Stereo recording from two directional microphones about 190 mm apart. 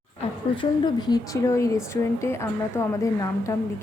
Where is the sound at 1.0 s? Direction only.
20° left (ahead or behind).